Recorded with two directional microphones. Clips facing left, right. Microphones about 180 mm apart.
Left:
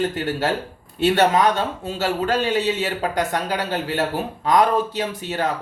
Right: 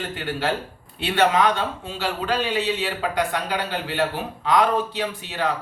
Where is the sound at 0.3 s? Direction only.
40° left (ahead or behind).